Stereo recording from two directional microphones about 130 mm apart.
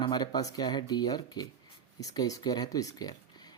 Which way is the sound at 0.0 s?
35° left (ahead or behind).